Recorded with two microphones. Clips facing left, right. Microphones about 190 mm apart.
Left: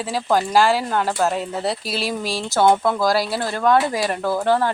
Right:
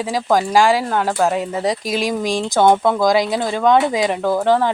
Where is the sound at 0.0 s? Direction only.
10° right (ahead or behind).